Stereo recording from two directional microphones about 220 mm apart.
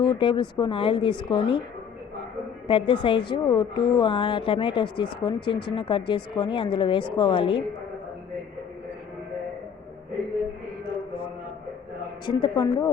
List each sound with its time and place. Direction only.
0.0 s a woman's voice: 20° left (ahead or behind)
2.6 s a woman's voice: 25° left (ahead or behind)
12.2 s a woman's voice: 20° left (ahead or behind)